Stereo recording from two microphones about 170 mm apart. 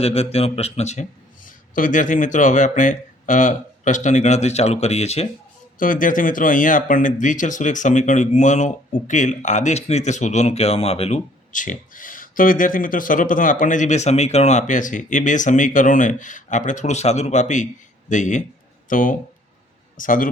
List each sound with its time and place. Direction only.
0.0 s speech: 35° left (ahead or behind)
1.5 s speech: 50° left (ahead or behind)
5.8 s speech: 50° left (ahead or behind)